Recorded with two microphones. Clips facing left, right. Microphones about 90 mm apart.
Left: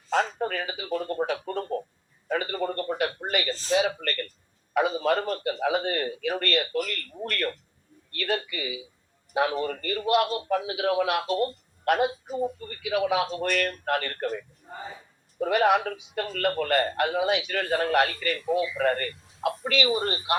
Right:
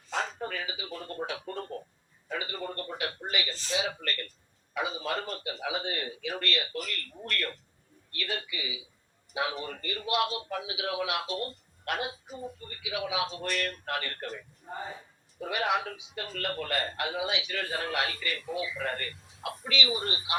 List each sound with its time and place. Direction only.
0.1 s telephone: 50° left (ahead or behind)
2.3 s a sound: 55° left (ahead or behind)
3.7 s a man's voice: 50° left (ahead or behind)